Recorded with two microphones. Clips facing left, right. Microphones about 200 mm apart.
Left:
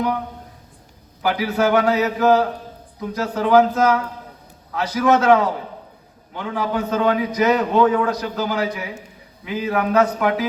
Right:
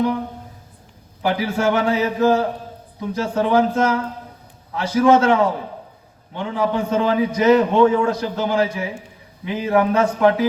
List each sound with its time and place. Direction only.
1.2 s a man's voice: 25° right (ahead or behind)